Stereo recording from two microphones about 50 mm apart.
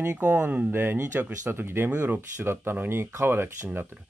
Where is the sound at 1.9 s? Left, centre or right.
Right.